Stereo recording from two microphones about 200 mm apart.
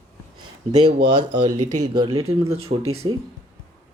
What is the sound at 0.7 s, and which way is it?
Speech, 25° right (ahead or behind).